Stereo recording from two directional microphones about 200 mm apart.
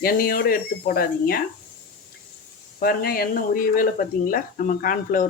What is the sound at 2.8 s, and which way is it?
Speech, 50° left (ahead or behind).